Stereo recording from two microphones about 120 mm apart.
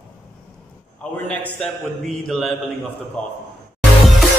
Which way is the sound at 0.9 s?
10° left (ahead or behind).